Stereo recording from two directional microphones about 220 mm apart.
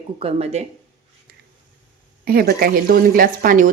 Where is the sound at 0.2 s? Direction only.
30° right (ahead or behind).